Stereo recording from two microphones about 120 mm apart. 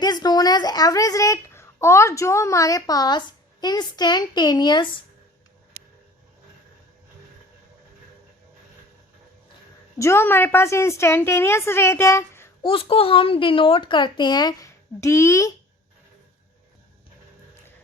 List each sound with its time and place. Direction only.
0.0 s speech: 35° left (ahead or behind)
10.0 s a woman's voice: 20° left (ahead or behind)
12.6 s speech: 50° left (ahead or behind); by 15.5 s 25° left (ahead or behind)